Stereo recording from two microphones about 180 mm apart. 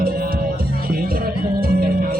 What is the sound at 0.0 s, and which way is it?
Music, 55° right (ahead or behind).